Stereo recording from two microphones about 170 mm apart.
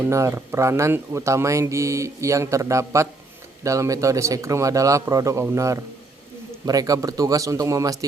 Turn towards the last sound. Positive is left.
turn(degrees=-20)  # may be behind; listen again after turning